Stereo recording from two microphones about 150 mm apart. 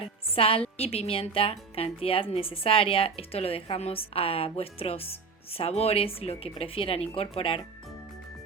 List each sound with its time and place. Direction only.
0.0 s a woman's voice: 40° left (ahead or behind)